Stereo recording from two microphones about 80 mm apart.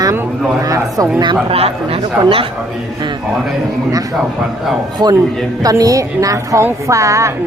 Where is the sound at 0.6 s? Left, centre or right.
Right.